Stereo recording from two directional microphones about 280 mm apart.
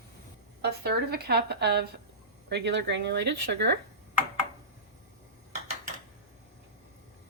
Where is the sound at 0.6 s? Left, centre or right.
Right.